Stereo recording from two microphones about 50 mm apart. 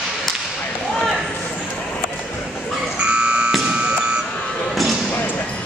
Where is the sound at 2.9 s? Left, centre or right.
Right.